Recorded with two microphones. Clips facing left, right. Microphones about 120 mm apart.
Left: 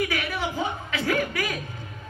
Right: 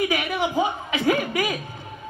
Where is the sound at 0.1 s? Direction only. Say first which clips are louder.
Right 5 dB; 20° right (ahead or behind).